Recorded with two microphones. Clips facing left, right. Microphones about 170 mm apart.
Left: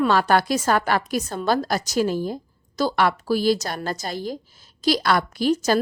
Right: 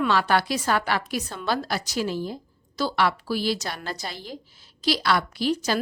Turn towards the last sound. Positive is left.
turn(degrees=45)  # may be behind; listen again after turning